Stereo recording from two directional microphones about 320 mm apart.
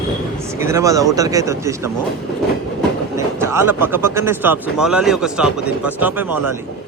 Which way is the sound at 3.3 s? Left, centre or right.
Centre.